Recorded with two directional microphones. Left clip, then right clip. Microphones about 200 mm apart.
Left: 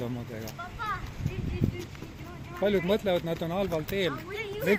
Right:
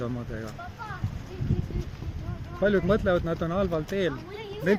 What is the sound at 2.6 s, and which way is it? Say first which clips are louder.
Speech: right 2 dB; 45° right (ahead or behind).